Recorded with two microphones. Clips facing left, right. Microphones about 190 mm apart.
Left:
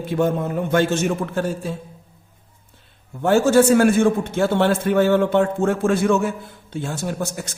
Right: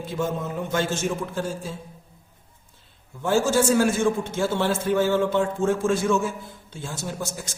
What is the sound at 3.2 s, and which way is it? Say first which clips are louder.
A man's voice: left 6 dB; 60° left (ahead or behind).